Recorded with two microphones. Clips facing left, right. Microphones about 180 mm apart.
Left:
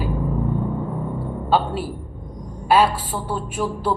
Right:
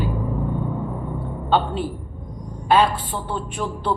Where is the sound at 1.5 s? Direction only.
5° left (ahead or behind).